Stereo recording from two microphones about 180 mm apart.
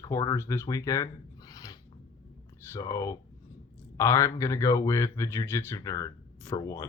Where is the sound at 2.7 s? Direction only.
20° left (ahead or behind).